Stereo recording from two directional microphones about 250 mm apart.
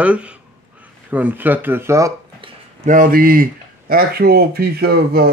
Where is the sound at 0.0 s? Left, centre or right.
Centre.